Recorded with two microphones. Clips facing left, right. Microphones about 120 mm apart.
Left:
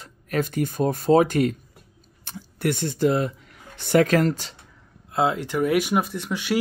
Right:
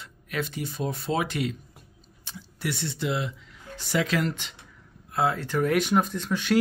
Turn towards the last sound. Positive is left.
turn(degrees=10)  # may be behind; listen again after turning